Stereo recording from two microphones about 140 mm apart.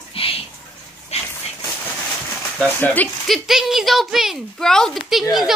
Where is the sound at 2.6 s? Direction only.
10° left (ahead or behind).